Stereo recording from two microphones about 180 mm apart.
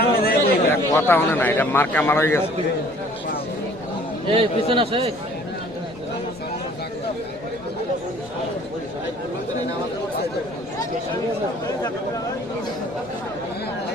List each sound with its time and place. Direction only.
0.0 s chatter: 60° left (ahead or behind)
0.9 s a man's voice: 10° left (ahead or behind)
4.3 s a man's voice: 30° right (ahead or behind)